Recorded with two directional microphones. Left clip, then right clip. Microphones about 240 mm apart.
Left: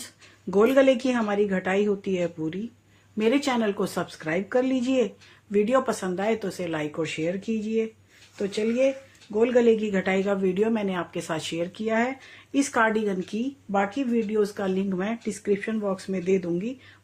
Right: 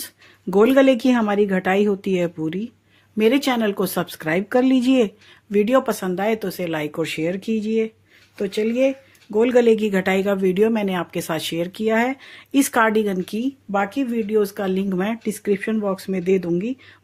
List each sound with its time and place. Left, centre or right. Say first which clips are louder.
0.5 s speech: right 4 dB; right